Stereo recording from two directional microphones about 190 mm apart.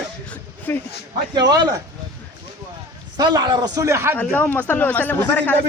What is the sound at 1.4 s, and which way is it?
Speech, 20° right (ahead or behind).